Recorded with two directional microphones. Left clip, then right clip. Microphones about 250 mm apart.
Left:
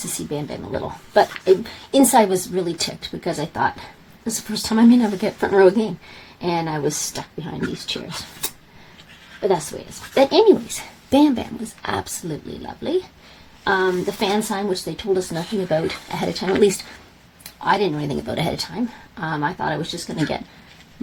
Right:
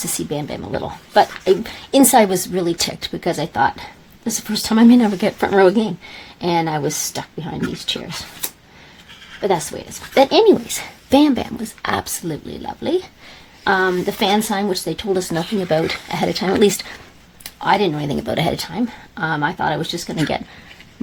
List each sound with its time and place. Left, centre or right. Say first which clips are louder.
0.3 s speech: right 3 dB; right
9.4 s speech: right 1 dB; right